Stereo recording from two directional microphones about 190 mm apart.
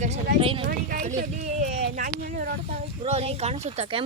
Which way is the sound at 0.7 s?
45° right (ahead or behind).